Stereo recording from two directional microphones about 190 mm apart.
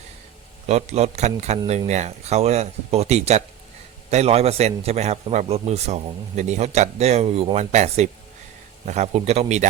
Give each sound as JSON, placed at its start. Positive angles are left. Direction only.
{"t": 0.7, "sound": "a man's voice", "side_deg": -35}